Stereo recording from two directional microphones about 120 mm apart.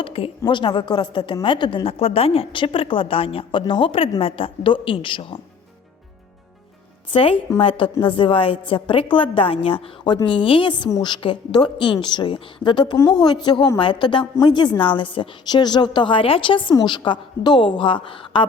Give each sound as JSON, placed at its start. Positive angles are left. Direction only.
{"t": 0.0, "sound": "a woman's voice", "side_deg": 50}
{"t": 7.1, "sound": "a woman's voice", "side_deg": 50}